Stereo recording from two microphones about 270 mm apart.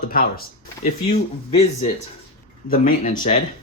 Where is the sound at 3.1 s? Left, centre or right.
Centre.